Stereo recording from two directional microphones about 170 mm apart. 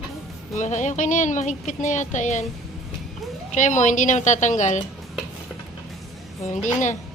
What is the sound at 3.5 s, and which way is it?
Speech, 45° left (ahead or behind).